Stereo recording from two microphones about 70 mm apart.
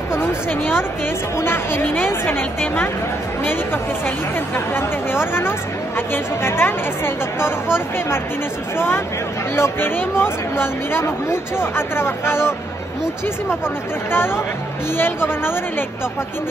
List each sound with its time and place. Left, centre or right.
0.1 s a sound: left
1.4 s speech: left
4.7 s speech: left
8.7 s speech: left
14.1 s speech: left